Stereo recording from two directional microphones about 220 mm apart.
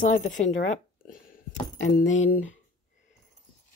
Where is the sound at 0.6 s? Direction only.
35° left (ahead or behind).